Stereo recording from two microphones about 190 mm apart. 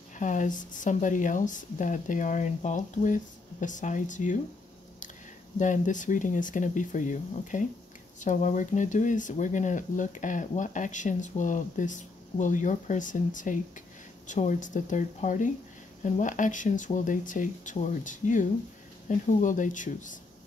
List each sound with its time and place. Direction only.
0.2 s speech: 40° left (ahead or behind)
5.6 s speech: 40° left (ahead or behind)